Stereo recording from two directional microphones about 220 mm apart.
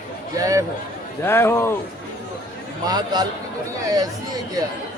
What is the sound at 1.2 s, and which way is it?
Speech, 10° left (ahead or behind).